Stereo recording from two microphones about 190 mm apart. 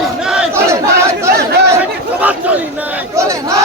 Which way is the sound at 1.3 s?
60° right (ahead or behind).